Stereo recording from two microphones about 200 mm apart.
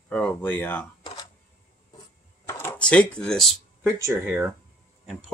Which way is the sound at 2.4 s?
10° left (ahead or behind).